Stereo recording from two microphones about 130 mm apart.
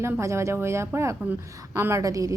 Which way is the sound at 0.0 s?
20° right (ahead or behind).